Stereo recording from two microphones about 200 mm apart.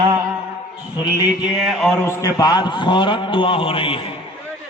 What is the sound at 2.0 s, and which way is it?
A man's voice, 15° left (ahead or behind).